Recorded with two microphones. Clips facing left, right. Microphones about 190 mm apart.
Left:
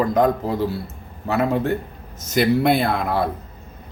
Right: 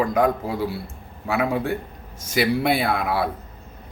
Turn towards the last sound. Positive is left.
turn(degrees=-10)  # may be behind; listen again after turning